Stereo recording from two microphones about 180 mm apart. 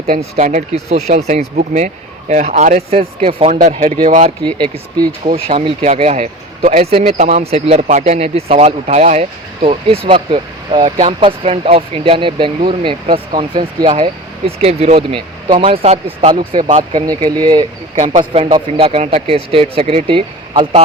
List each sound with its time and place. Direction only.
0.0 s speech: 40° right (ahead or behind)
3.2 s speech: 30° right (ahead or behind)
4.5 s speech: 25° right (ahead or behind)
17.9 s speech: 45° right (ahead or behind)
18.5 s speech: 30° right (ahead or behind)